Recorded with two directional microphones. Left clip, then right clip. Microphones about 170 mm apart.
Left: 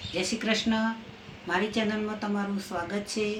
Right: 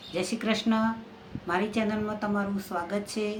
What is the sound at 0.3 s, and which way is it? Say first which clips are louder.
A woman's voice: left 1 dB; 10° right (ahead or behind).